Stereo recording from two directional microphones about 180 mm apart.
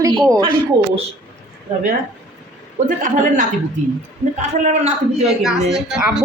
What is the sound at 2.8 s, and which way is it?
Speech, 45° right (ahead or behind).